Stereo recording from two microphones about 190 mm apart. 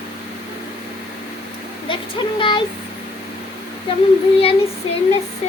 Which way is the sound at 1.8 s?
25° left (ahead or behind).